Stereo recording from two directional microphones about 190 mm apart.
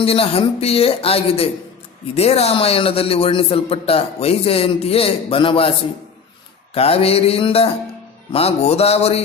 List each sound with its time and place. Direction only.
0.0 s a man's voice: 30° left (ahead or behind)
6.7 s a man's voice: 30° left (ahead or behind)